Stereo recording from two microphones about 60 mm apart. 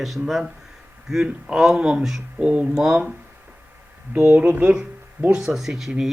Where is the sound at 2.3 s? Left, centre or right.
Centre.